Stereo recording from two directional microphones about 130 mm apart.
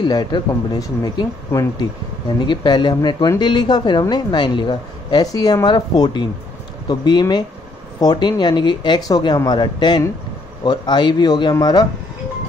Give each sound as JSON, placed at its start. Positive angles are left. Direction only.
{"t": 0.0, "sound": "speech", "side_deg": 35}